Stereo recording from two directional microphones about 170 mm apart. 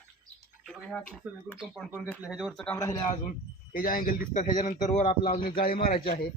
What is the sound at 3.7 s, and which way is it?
A man's voice, 55° left (ahead or behind).